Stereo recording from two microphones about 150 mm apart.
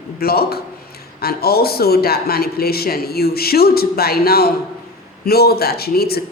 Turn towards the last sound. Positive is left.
turn(degrees=90)